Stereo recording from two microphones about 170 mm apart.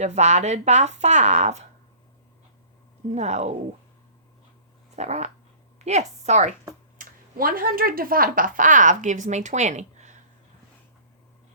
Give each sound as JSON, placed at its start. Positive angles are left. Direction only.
{"t": 0.0, "sound": "speech", "side_deg": -40}
{"t": 3.1, "sound": "speech", "side_deg": -40}
{"t": 4.9, "sound": "speech", "side_deg": -40}
{"t": 7.0, "sound": "speech", "side_deg": -55}